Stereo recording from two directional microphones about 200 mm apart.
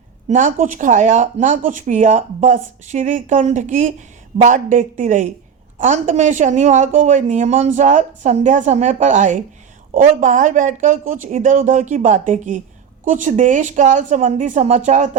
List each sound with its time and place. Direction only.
0.3 s speech: 40° right (ahead or behind)